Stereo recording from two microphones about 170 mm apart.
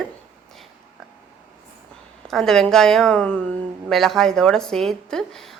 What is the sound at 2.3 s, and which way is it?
A woman's voice, centre (ahead or behind).